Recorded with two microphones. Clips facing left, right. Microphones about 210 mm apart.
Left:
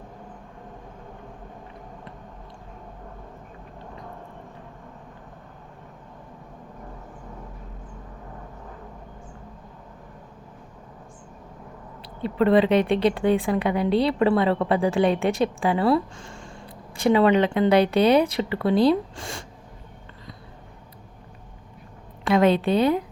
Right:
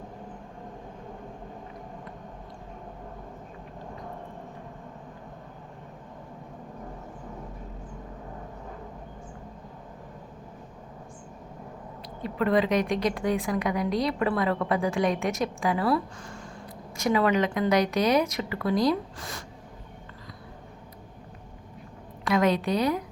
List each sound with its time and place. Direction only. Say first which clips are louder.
12.2 s a woman's voice: left 6 dB; 30° left (ahead or behind)
22.2 s a woman's voice: left 5 dB; 30° left (ahead or behind)